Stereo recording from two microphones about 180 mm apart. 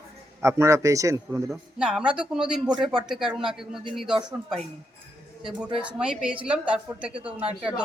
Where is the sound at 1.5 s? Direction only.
5° right (ahead or behind).